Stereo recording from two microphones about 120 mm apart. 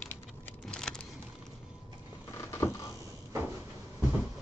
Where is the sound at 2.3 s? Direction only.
25° left (ahead or behind).